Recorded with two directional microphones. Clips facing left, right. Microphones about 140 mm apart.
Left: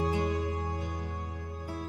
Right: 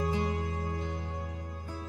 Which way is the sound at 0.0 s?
20° left (ahead or behind).